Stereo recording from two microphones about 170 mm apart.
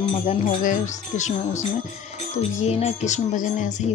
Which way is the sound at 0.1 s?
40° left (ahead or behind).